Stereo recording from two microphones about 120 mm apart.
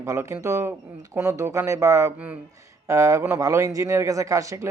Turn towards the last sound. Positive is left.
turn(degrees=-25)  # may be behind; listen again after turning